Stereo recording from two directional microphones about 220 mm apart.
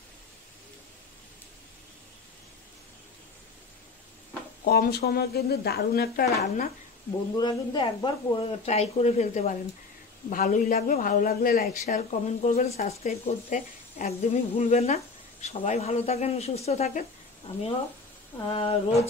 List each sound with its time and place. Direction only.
4.6 s a woman's voice: 45° left (ahead or behind)
7.3 s speech: 20° left (ahead or behind)
18.5 s speech: 25° left (ahead or behind)